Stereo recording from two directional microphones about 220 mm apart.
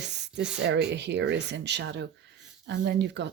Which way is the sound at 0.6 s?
50° right (ahead or behind).